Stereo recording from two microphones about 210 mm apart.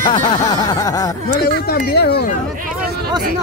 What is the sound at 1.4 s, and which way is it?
Speech, 45° left (ahead or behind).